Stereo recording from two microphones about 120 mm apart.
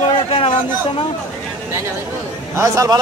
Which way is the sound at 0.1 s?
55° left (ahead or behind).